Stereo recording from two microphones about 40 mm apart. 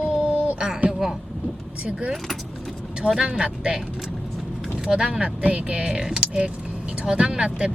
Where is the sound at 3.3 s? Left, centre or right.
Right.